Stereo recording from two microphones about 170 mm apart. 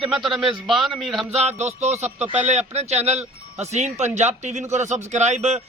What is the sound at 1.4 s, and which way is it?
A man's voice, 40° right (ahead or behind).